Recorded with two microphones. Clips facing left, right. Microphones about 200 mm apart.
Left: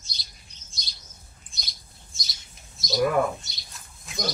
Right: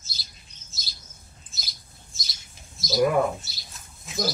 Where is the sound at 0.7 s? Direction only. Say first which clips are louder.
Right 1 dB; 5° right (ahead or behind).